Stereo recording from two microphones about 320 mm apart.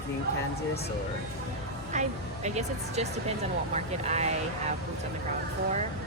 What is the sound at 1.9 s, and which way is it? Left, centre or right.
Speech, right.